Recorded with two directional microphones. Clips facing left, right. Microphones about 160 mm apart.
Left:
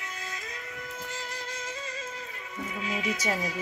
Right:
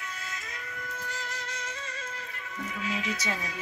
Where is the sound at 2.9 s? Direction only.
10° left (ahead or behind).